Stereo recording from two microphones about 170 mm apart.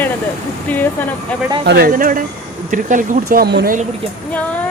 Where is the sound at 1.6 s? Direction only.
75° right (ahead or behind).